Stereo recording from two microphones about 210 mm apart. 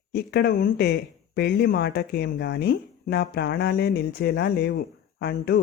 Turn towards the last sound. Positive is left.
turn(degrees=50)  # may be behind; listen again after turning